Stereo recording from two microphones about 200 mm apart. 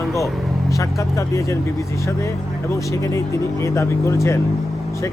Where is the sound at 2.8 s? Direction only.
15° left (ahead or behind).